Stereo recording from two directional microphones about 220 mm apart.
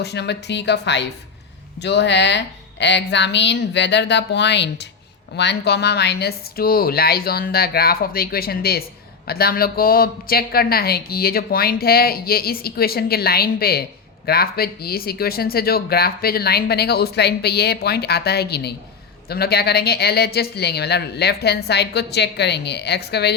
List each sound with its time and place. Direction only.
0.0 s a woman's voice: 50° left (ahead or behind)